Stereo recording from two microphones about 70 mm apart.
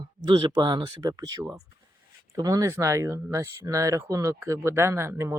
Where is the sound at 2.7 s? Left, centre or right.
Right.